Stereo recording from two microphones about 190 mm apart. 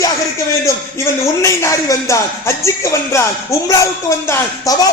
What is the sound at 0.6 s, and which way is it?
A man's voice, 15° left (ahead or behind).